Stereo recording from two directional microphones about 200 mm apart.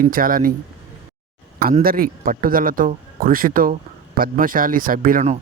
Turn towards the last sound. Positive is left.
turn(degrees=-40)  # may be behind; listen again after turning